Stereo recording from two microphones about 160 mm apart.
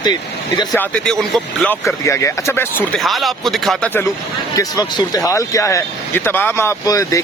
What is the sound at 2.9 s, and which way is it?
Speech, centre (ahead or behind).